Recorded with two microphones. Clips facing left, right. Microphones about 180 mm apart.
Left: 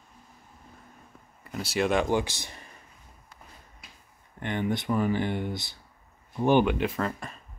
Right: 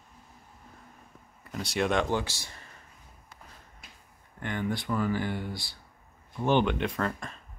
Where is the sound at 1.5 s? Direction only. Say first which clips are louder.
Left 2 dB; 5° left (ahead or behind); by 2.6 s 20° left (ahead or behind).